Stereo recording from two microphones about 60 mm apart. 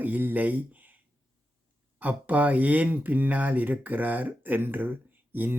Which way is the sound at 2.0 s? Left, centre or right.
Right.